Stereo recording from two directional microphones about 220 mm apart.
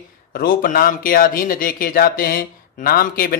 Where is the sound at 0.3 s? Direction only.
40° left (ahead or behind).